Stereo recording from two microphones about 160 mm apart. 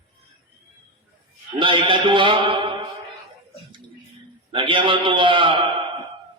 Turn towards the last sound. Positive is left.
turn(degrees=-30)  # may be behind; listen again after turning